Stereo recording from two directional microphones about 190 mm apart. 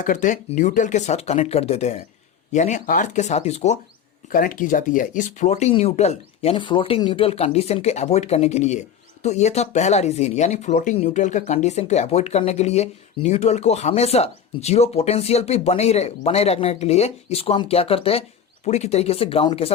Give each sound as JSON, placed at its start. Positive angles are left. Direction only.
{"t": 0.0, "sound": "speech", "side_deg": 45}
{"t": 4.3, "sound": "speech", "side_deg": 45}